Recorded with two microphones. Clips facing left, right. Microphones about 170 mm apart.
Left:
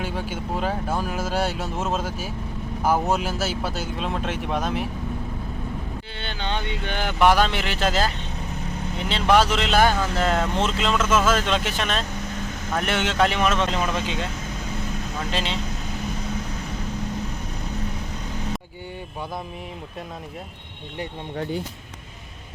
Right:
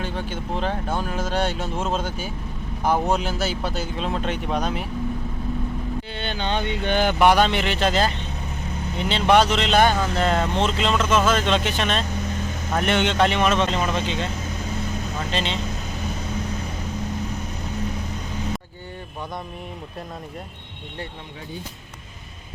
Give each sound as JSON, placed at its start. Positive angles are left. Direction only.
{"t": 0.0, "sound": "speech", "side_deg": 10}
{"t": 6.1, "sound": "speech", "side_deg": -15}
{"t": 7.2, "sound": "speech", "side_deg": 0}
{"t": 15.3, "sound": "speech", "side_deg": 5}